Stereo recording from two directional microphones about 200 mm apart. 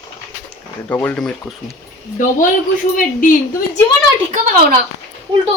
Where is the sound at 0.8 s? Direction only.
10° left (ahead or behind).